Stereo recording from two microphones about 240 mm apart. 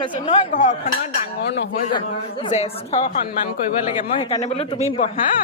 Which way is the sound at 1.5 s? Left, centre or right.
Left.